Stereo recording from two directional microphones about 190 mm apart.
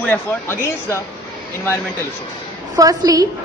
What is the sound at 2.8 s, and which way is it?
Speech, 20° right (ahead or behind).